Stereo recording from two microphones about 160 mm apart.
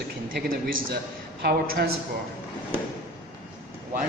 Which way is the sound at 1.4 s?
75° right (ahead or behind).